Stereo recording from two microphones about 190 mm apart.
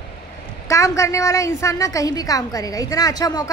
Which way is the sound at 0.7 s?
15° left (ahead or behind).